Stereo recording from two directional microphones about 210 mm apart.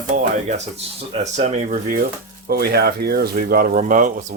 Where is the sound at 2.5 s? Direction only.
50° right (ahead or behind).